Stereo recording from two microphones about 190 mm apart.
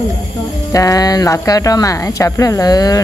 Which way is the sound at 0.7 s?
20° left (ahead or behind).